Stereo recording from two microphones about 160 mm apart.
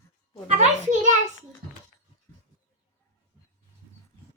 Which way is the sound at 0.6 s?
50° right (ahead or behind).